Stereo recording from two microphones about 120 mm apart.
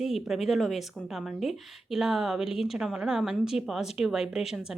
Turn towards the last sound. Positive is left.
turn(degrees=-5)  # may be behind; listen again after turning